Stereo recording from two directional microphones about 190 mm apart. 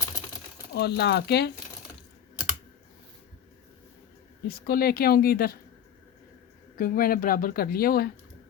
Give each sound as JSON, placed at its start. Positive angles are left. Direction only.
{"t": 0.7, "sound": "speech", "side_deg": 60}
{"t": 4.4, "sound": "speech", "side_deg": 55}
{"t": 6.7, "sound": "speech", "side_deg": 50}